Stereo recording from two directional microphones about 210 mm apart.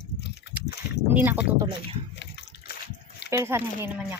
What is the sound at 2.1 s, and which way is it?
Water, 55° left (ahead or behind).